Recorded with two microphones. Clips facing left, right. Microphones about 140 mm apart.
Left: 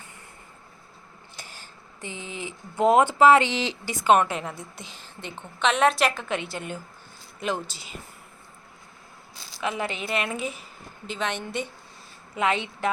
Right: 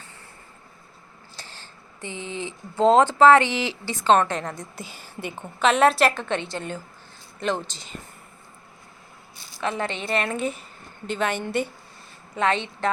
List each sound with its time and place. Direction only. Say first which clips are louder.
1.4 s a sound: right 1 dB; 10° left (ahead or behind)
2.1 s speech: right 5 dB; 20° right (ahead or behind)
2.4 s a woman's voice: right 2 dB; 15° left (ahead or behind)
9.6 s a woman's voice: right 2 dB; 10° left (ahead or behind)
12.4 s speech: right 2 dB; 10° left (ahead or behind)